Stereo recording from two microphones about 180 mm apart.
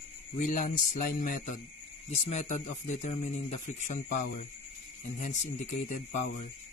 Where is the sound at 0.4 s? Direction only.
40° left (ahead or behind).